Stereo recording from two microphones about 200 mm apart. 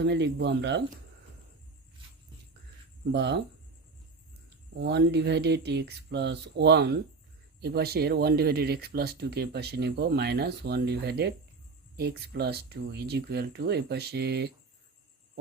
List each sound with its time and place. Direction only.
0.0 s speech: 55° right (ahead or behind)
3.1 s speech: 60° right (ahead or behind)
4.8 s speech: 55° right (ahead or behind)